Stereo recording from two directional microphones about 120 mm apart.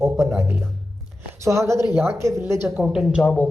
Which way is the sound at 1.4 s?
25° right (ahead or behind).